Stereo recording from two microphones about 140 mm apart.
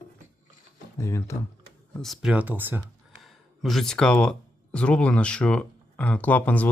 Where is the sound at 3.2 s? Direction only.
Centre (ahead or behind).